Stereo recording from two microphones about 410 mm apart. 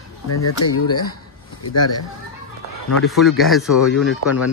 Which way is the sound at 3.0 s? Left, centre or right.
Centre.